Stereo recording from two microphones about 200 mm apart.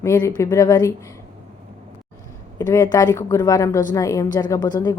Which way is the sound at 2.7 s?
20° left (ahead or behind).